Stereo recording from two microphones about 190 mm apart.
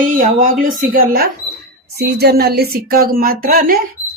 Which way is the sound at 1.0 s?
50° right (ahead or behind).